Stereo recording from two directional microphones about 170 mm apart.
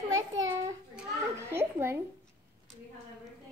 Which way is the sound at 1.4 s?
15° right (ahead or behind).